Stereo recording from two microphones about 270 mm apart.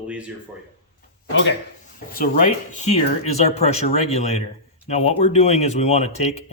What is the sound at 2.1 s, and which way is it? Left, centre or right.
Speech, left.